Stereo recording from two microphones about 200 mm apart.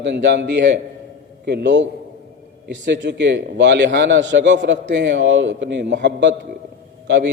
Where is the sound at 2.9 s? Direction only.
60° right (ahead or behind).